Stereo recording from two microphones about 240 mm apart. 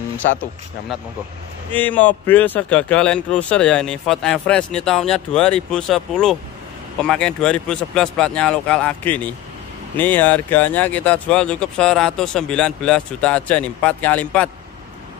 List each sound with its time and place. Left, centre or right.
0.2 s speech: left
1.7 s a man's voice: centre